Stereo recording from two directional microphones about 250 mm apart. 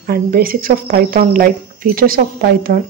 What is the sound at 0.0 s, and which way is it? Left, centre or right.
Speech, right.